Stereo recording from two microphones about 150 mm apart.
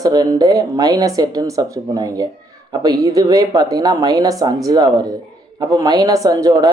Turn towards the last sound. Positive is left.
turn(degrees=-25)  # may be behind; listen again after turning